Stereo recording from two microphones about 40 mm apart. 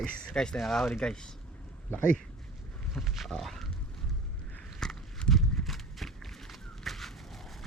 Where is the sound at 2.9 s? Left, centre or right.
Centre.